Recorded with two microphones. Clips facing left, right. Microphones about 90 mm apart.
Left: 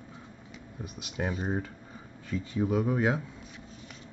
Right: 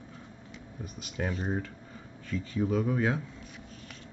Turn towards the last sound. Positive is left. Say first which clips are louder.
# left 1 dB
turn(degrees=15)  # may be behind; listen again after turning